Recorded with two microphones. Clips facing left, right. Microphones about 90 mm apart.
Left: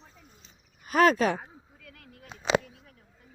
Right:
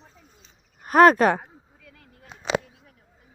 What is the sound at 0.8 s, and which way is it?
Speech, 50° right (ahead or behind).